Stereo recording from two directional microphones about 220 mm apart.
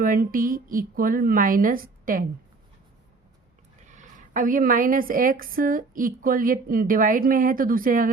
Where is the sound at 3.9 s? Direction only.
35° right (ahead or behind).